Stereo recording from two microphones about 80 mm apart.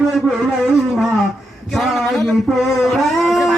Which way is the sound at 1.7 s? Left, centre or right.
Centre.